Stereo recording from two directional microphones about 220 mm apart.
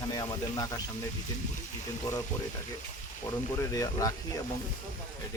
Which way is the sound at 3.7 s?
15° left (ahead or behind).